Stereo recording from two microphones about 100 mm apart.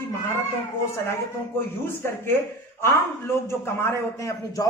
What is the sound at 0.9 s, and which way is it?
A man's voice, 25° left (ahead or behind).